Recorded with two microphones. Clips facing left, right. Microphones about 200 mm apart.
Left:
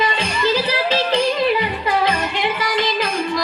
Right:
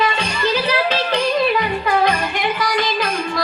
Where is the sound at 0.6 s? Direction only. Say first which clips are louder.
Even; 30° left (ahead or behind).